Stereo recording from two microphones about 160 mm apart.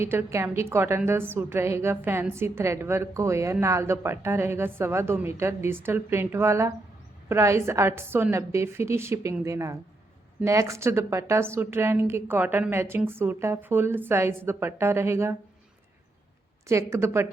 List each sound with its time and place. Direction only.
0.0 s a woman's voice: 15° right (ahead or behind)
16.6 s a woman's voice: 20° right (ahead or behind)